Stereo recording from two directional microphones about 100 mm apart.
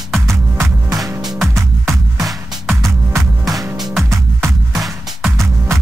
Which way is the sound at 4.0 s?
30° right (ahead or behind).